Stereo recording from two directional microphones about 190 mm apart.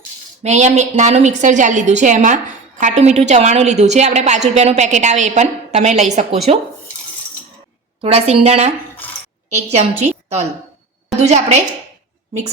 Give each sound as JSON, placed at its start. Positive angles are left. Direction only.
{"t": 0.4, "sound": "a woman's voice", "side_deg": -35}
{"t": 8.0, "sound": "a woman's voice", "side_deg": -30}
{"t": 9.7, "sound": "a woman's voice", "side_deg": -35}